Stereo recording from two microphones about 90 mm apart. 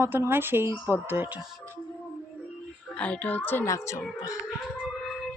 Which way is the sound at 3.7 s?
35° left (ahead or behind).